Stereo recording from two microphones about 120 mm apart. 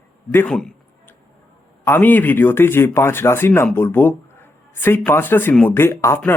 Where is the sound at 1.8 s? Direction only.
15° left (ahead or behind).